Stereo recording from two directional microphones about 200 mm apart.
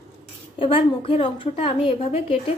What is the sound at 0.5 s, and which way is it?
A woman's voice, 25° left (ahead or behind).